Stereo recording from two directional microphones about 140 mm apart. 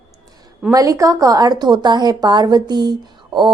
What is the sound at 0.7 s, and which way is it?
A woman's voice, 25° right (ahead or behind).